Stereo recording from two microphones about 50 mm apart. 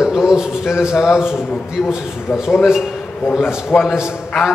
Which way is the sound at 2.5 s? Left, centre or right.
Centre.